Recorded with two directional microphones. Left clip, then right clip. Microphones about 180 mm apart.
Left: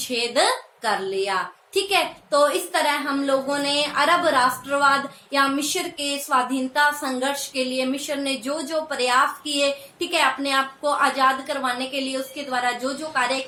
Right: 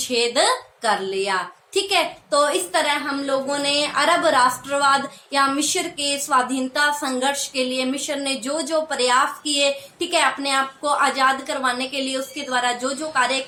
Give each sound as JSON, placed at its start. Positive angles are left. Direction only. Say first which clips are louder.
{"t": 0.1, "sound": "a woman's voice", "louder": "right 2 dB", "side_deg": -15}